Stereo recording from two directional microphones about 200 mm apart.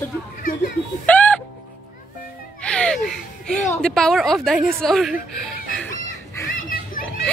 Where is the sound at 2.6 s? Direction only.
5° left (ahead or behind).